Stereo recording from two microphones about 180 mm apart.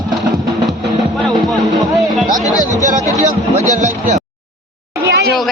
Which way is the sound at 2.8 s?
40° right (ahead or behind).